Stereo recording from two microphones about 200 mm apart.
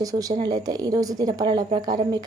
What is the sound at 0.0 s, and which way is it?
A woman's voice, 15° right (ahead or behind).